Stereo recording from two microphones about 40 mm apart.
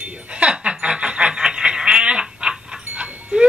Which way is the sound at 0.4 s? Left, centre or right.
Right.